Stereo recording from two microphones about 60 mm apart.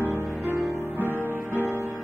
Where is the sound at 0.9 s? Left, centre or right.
Right.